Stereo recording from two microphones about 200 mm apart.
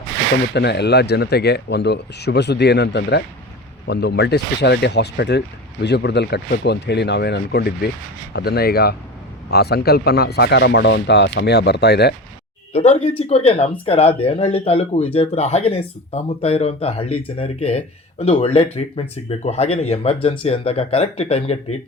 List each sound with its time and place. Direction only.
0.5 s speech: 55° left (ahead or behind)
12.7 s speech: 30° left (ahead or behind)